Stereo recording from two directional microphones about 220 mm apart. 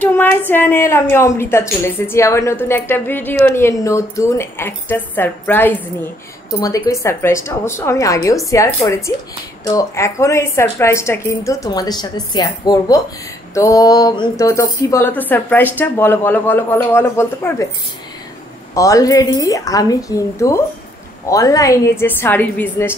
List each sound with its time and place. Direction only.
0.0 s a woman's voice: 10° left (ahead or behind)
18.8 s a woman's voice: 15° left (ahead or behind)